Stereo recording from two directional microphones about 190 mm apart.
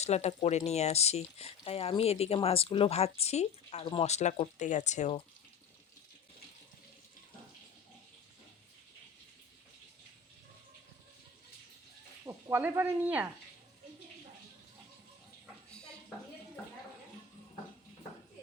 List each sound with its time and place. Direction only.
0.0 s speech: 35° left (ahead or behind)
12.2 s speech: 15° right (ahead or behind)
15.7 s a sound: 5° left (ahead or behind)